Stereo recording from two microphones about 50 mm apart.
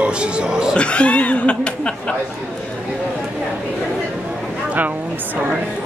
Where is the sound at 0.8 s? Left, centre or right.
Left.